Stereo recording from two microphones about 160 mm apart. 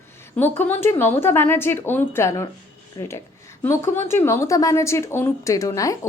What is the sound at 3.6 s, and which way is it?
Speech, 15° left (ahead or behind).